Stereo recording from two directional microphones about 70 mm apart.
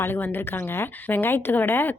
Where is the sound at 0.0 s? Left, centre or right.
Left.